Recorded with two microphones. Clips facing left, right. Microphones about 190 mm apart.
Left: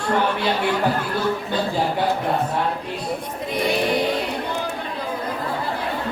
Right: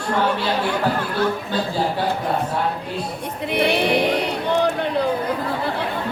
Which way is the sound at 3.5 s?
65° right (ahead or behind).